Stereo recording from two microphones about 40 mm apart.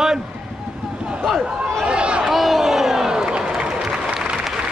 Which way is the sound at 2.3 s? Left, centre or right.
Centre.